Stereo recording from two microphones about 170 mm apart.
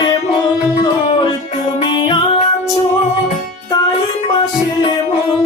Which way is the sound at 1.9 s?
30° left (ahead or behind).